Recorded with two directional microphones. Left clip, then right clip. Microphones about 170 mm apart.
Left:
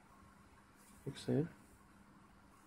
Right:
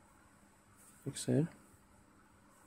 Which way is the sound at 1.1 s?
60° right (ahead or behind).